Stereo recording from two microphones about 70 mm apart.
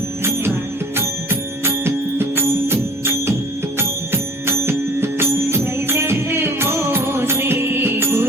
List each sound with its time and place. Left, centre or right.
0.9 s music: right